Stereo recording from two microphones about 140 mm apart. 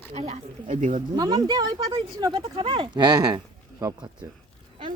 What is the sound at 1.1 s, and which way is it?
Speech, 30° right (ahead or behind).